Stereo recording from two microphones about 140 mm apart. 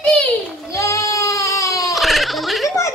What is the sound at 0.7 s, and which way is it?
Goat, 20° left (ahead or behind).